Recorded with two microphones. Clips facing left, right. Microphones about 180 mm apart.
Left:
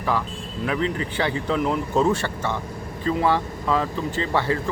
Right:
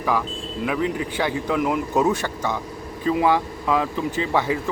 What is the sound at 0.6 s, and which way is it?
Speech, 5° right (ahead or behind).